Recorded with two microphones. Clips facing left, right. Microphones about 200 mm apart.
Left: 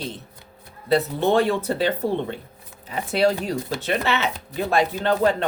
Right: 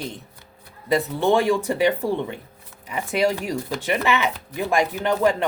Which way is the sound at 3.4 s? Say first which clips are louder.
Even; 10° right (ahead or behind).